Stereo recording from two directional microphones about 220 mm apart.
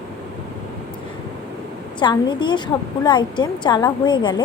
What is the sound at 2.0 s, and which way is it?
A woman's voice, 20° left (ahead or behind).